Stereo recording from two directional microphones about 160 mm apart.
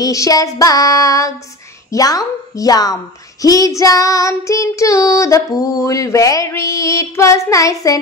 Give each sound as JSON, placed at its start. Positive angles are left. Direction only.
{"t": 0.0, "sound": "child singing", "side_deg": 20}